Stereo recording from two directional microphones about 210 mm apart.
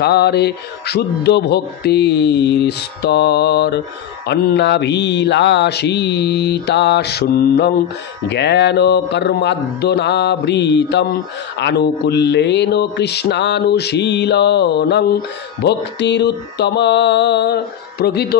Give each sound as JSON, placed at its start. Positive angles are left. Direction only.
{"t": 0.0, "sound": "speech", "side_deg": 50}